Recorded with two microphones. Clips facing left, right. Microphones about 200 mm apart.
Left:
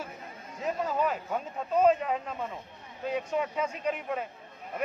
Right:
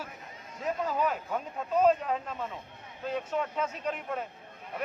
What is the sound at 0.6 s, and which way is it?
Speech, centre (ahead or behind).